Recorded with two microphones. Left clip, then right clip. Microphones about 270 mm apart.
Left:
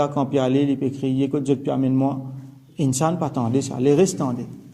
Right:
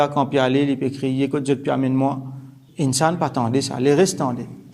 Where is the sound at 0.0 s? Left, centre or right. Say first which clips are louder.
Right 3 dB; centre.